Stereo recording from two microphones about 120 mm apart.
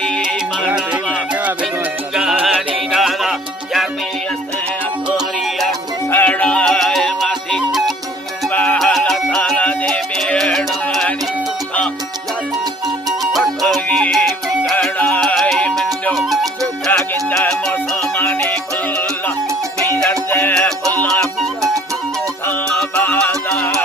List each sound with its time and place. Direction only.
0.0 s music: 10° left (ahead or behind)
2.4 s music: centre (ahead or behind)
6.1 s music: 15° left (ahead or behind)
8.5 s music: 15° left (ahead or behind)
8.8 s music: centre (ahead or behind)
13.3 s music: centre (ahead or behind)
14.9 s music: 15° left (ahead or behind)
20.1 s music: 20° left (ahead or behind)
20.5 s music: 10° left (ahead or behind)
22.4 s music: 20° left (ahead or behind)
23.3 s music: 5° left (ahead or behind)